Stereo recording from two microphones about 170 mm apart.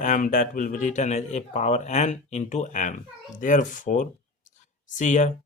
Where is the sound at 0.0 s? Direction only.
50° left (ahead or behind).